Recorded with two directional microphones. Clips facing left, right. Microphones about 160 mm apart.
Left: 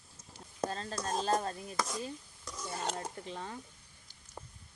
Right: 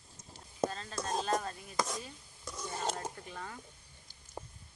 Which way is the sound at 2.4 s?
10° right (ahead or behind).